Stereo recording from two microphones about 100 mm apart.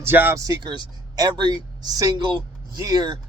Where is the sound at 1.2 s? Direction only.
45° right (ahead or behind).